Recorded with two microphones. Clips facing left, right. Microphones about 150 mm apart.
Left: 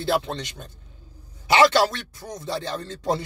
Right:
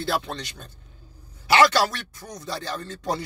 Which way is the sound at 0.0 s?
25° left (ahead or behind).